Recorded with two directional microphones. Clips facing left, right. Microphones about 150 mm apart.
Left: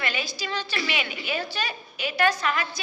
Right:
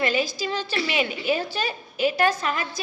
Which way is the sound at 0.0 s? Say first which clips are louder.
Right 7 dB; 35° right (ahead or behind).